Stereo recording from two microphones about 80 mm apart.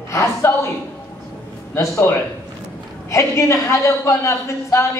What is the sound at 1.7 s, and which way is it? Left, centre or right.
Speech, left.